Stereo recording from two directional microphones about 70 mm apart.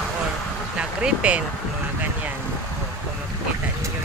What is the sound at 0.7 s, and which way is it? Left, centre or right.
Vehicle, centre.